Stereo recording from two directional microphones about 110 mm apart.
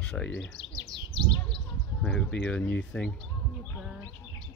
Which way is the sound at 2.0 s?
10° left (ahead or behind).